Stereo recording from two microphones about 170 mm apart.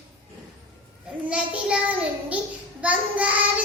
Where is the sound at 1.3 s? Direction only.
5° right (ahead or behind).